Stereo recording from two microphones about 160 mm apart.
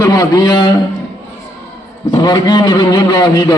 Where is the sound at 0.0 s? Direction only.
20° left (ahead or behind).